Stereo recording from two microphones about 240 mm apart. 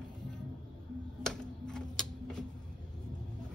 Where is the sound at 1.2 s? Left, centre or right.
Centre.